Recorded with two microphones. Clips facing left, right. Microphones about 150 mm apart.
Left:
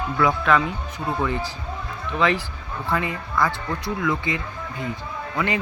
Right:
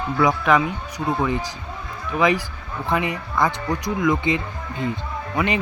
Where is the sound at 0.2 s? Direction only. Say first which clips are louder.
Right 2 dB; 15° right (ahead or behind).